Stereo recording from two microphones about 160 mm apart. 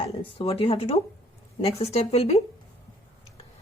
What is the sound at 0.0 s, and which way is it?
Speech, 35° left (ahead or behind).